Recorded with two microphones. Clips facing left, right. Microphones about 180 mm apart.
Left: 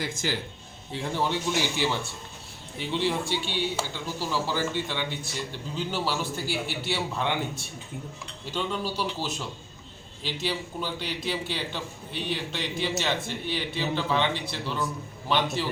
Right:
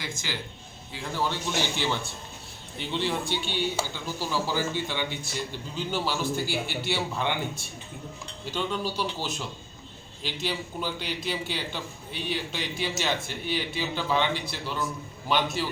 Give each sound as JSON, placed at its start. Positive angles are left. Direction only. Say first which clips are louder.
{"t": 0.0, "sound": "speech", "louder": "left 5 dB", "side_deg": 45}
{"t": 0.9, "sound": "a man's voice", "louder": "left 2 dB", "side_deg": 25}
{"t": 1.7, "sound": "a man's voice", "louder": "left 1 dB", "side_deg": 5}